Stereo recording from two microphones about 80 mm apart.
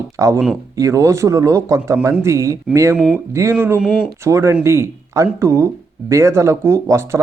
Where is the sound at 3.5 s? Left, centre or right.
Right.